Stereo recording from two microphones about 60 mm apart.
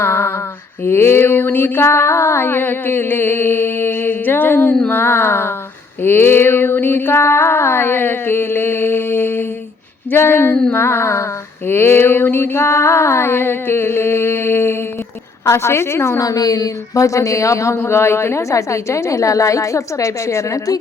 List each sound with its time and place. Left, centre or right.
0.0 s female singing: left
0.9 s mantra: left
15.4 s a woman's voice: left
16.2 s speech: left